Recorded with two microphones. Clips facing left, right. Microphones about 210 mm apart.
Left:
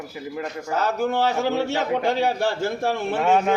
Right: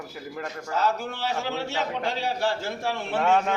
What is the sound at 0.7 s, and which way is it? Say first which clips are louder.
A man's voice: left 5 dB; 45° left (ahead or behind).